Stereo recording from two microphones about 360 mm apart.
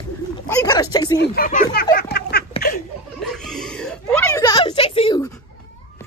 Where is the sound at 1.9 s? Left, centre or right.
Left.